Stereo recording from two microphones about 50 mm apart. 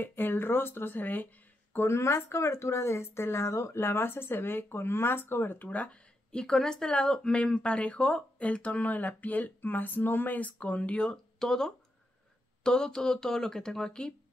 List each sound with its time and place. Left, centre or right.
0.0 s speech: left
1.8 s speech: left
6.3 s speech: centre